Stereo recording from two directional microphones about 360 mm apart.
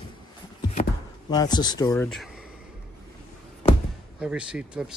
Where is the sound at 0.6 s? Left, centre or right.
Centre.